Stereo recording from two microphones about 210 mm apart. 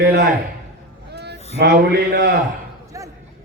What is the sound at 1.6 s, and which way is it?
Speech, 50° right (ahead or behind).